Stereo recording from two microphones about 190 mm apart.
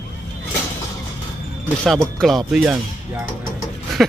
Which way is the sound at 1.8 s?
Centre (ahead or behind).